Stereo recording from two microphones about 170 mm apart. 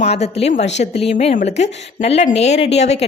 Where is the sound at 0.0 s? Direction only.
40° left (ahead or behind).